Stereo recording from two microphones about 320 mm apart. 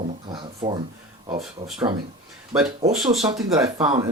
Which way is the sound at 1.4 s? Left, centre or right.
Centre.